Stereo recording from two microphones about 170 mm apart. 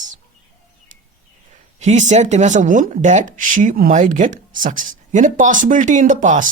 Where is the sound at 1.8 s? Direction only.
45° right (ahead or behind).